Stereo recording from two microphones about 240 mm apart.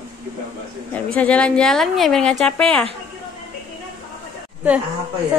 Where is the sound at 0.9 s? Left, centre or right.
Centre.